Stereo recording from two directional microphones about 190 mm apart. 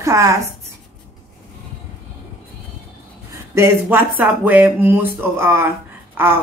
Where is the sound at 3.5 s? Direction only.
10° right (ahead or behind).